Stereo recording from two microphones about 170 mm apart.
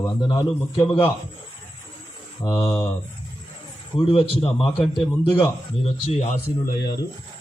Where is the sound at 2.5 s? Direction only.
30° left (ahead or behind).